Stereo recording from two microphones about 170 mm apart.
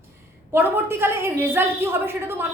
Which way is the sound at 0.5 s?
15° right (ahead or behind).